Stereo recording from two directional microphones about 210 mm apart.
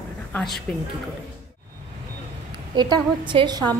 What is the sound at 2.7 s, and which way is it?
A woman's voice, 20° right (ahead or behind).